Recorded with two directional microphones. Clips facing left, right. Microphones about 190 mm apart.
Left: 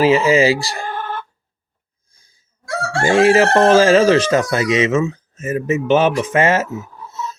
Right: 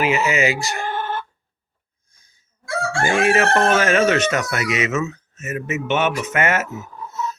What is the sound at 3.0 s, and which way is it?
Speech, 30° left (ahead or behind).